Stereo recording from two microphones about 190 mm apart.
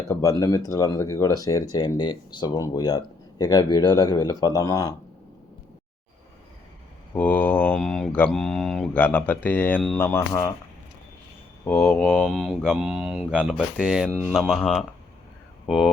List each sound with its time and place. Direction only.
0.1 s speech: 15° left (ahead or behind)
7.1 s speech: 10° left (ahead or behind)
11.6 s speech: 15° left (ahead or behind)